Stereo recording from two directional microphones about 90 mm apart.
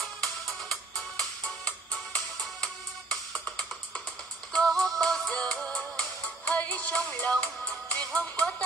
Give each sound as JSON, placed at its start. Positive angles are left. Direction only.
{"t": 0.0, "sound": "music", "side_deg": 0}